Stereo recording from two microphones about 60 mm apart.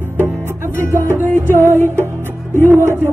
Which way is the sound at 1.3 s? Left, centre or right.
Left.